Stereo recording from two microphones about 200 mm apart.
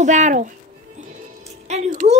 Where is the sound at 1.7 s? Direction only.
35° right (ahead or behind).